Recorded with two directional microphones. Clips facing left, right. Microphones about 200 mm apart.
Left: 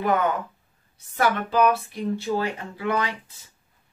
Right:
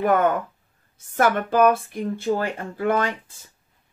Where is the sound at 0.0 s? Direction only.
50° right (ahead or behind).